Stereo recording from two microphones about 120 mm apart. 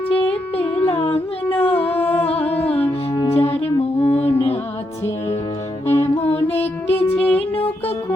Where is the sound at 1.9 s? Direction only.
15° left (ahead or behind).